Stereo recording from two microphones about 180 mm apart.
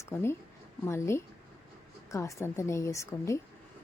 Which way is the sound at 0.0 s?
15° left (ahead or behind).